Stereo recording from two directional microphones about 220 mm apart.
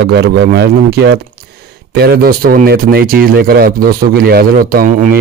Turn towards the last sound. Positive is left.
turn(degrees=-35)  # may be behind; listen again after turning